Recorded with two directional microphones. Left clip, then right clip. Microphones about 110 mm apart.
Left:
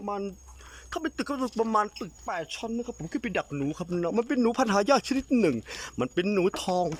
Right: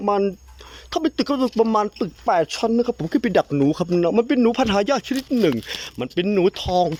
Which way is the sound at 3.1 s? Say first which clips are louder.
Right 10 dB; 50° right (ahead or behind).